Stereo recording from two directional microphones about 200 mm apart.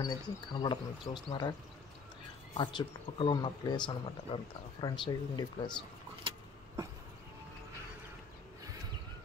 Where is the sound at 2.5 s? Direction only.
25° left (ahead or behind).